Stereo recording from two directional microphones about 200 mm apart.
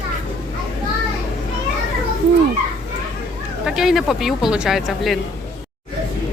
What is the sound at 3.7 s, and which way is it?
Speech, centre (ahead or behind).